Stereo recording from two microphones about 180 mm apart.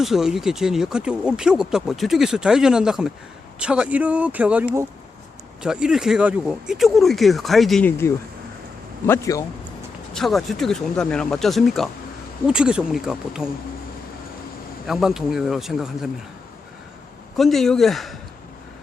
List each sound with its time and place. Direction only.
0.0 s a man's voice: centre (ahead or behind); by 9.4 s 15° left (ahead or behind)
10.2 s speech: centre (ahead or behind)
14.8 s speech: centre (ahead or behind)
17.3 s speech: centre (ahead or behind)